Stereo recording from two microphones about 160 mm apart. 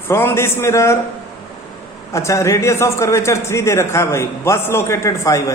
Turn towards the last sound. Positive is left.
turn(degrees=20)  # may be behind; listen again after turning